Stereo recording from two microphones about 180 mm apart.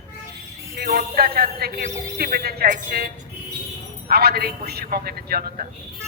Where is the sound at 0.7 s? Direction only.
60° right (ahead or behind).